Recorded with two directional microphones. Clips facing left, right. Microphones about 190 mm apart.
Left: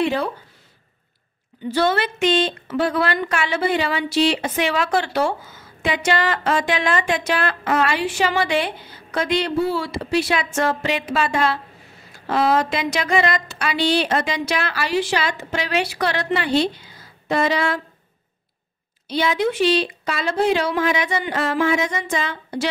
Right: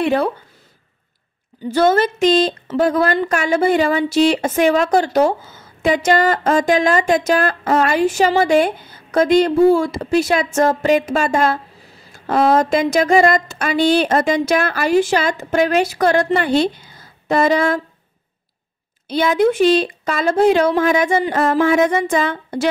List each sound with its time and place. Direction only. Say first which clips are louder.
0.0 s speech: right 4 dB; 55° right (ahead or behind)
1.6 s a woman's voice: right 5 dB; 45° right (ahead or behind)
19.0 s speech: right 5 dB; 50° right (ahead or behind)